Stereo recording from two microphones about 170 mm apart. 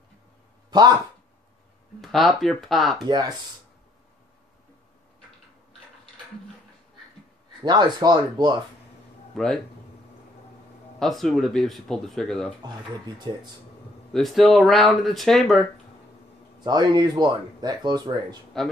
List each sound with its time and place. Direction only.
0.7 s a sound: 25° right (ahead or behind)
2.0 s speech: centre (ahead or behind)
3.1 s speech: 25° right (ahead or behind)
7.6 s speech: 25° right (ahead or behind)
11.0 s speech: centre (ahead or behind)
14.1 s speech: centre (ahead or behind)
16.6 s speech: 25° right (ahead or behind)